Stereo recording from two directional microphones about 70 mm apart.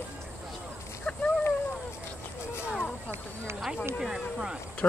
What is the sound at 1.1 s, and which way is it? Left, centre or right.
Speech, centre.